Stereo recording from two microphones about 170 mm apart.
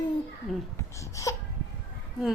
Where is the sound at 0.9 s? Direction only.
20° left (ahead or behind).